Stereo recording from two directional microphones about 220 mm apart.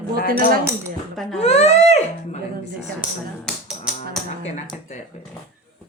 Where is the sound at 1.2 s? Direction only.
Centre (ahead or behind).